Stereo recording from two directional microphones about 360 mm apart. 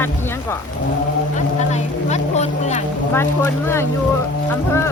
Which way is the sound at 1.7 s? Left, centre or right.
Centre.